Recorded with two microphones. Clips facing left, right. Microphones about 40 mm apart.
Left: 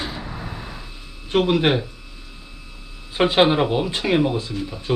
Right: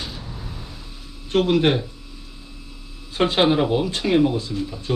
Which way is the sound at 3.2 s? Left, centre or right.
Centre.